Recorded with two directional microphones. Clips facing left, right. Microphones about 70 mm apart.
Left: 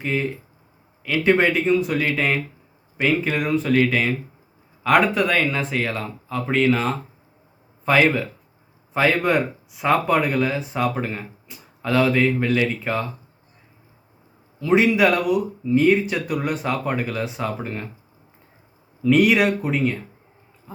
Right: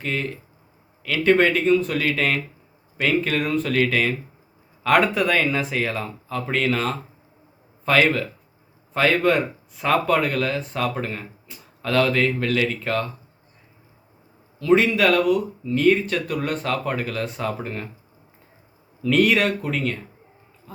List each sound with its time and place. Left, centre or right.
0.0 s speech: centre
14.6 s speech: centre
19.0 s speech: centre
20.7 s pig: centre